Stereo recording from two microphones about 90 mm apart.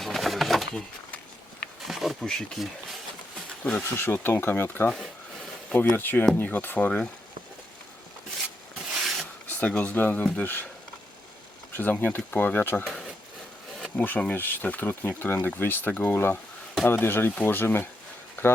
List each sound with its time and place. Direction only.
0.0 s a sound: centre (ahead or behind)
1.8 s speech: centre (ahead or behind)
3.9 s speech: 25° left (ahead or behind)
9.5 s speech: 15° left (ahead or behind)
11.8 s speech: 20° left (ahead or behind)
12.8 s a sound: 5° left (ahead or behind)
13.9 s speech: 20° left (ahead or behind)